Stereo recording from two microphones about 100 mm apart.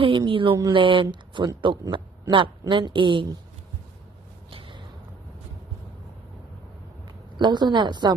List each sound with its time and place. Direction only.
0.0 s a woman's voice: 55° right (ahead or behind)
4.5 s a sound: 55° right (ahead or behind)
7.3 s a woman's voice: 50° right (ahead or behind)